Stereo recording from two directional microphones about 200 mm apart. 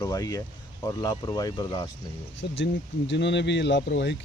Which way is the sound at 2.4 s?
60° left (ahead or behind).